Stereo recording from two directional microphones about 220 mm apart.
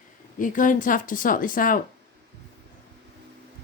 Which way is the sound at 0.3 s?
35° left (ahead or behind).